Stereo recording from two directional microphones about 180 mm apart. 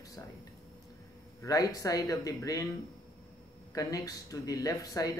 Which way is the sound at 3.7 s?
20° left (ahead or behind).